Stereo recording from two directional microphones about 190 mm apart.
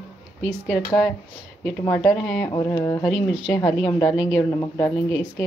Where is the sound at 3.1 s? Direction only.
5° right (ahead or behind).